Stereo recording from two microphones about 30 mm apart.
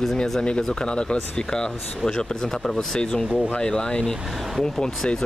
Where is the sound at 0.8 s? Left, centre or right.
Left.